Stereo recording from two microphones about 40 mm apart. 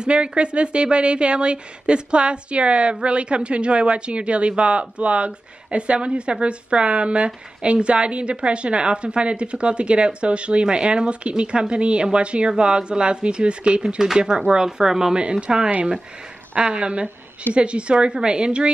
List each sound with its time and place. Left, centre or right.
0.0 s a woman's voice: right